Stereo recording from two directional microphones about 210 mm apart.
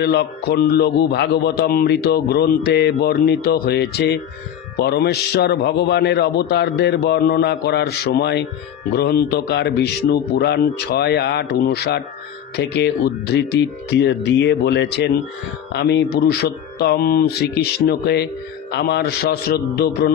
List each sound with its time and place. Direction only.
0.0 s speech: 50° left (ahead or behind)